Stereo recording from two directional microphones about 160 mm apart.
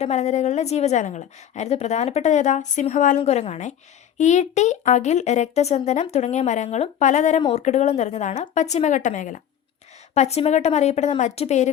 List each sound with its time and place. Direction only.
0.0 s a woman's voice: 45° left (ahead or behind)